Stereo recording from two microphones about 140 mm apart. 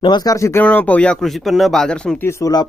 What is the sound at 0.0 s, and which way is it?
Speech, 30° left (ahead or behind).